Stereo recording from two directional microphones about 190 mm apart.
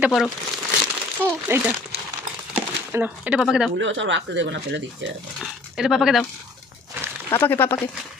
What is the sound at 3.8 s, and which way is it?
Speech, 75° right (ahead or behind).